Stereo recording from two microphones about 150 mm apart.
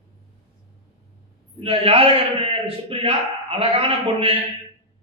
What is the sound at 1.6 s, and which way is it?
A woman's voice, 40° right (ahead or behind).